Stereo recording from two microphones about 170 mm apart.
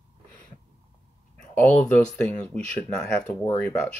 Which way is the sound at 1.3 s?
10° left (ahead or behind).